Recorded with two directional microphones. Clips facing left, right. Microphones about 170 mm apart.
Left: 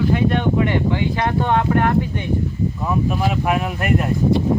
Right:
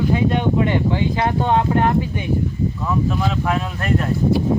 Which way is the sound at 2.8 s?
15° left (ahead or behind).